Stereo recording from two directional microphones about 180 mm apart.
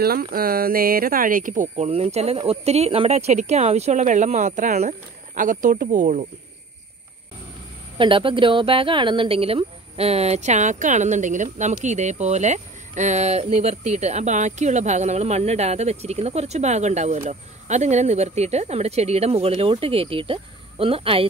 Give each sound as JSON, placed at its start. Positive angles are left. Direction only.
{"t": 0.0, "sound": "speech", "side_deg": -55}
{"t": 8.0, "sound": "speech", "side_deg": -30}